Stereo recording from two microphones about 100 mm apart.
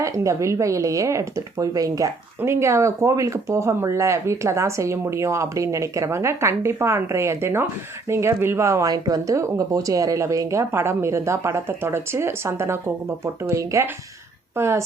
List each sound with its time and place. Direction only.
0.0 s speech: 30° right (ahead or behind)